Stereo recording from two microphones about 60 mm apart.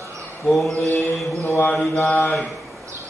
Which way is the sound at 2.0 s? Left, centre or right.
Left.